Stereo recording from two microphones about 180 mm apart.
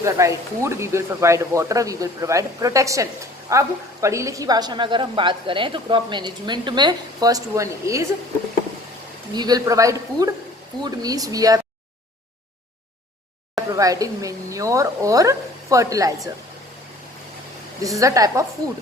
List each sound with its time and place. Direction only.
0.0 s speech: 15° right (ahead or behind)
9.3 s speech: 20° right (ahead or behind)
13.7 s speech: 20° right (ahead or behind)
17.8 s a woman's voice: 20° right (ahead or behind)